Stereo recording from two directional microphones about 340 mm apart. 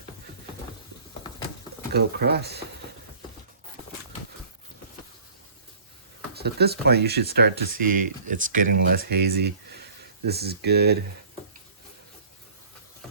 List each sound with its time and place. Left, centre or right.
1.9 s speech: right
6.3 s speech: right